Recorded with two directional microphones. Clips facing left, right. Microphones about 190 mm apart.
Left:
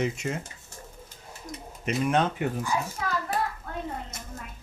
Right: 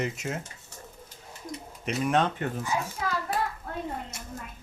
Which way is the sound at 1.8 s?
Centre (ahead or behind).